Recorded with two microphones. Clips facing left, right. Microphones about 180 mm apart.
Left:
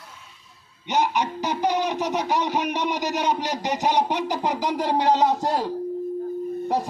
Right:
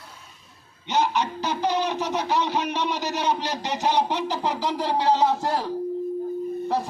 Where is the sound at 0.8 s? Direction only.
15° left (ahead or behind).